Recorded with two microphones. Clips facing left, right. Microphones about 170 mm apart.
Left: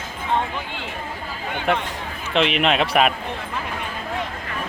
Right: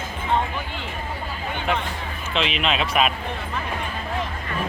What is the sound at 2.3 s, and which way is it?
Speech, 60° left (ahead or behind).